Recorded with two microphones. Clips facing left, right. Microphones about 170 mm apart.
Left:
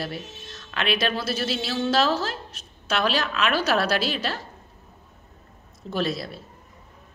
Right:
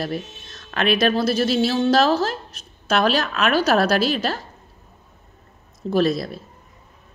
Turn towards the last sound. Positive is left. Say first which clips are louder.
# right 7 dB
turn(degrees=-45)  # may be behind; listen again after turning